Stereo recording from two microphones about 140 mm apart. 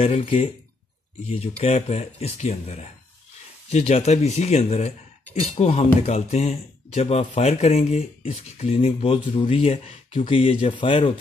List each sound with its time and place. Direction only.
0.0 s speech: 45° left (ahead or behind)